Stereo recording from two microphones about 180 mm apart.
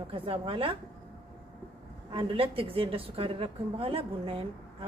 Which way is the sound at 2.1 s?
30° right (ahead or behind).